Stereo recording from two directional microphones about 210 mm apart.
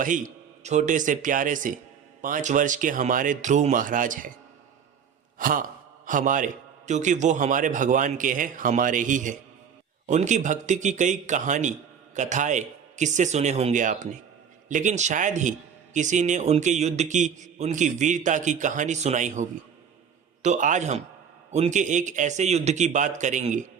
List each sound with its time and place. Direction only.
0.0 s speech: 40° right (ahead or behind)
5.4 s speech: 40° right (ahead or behind)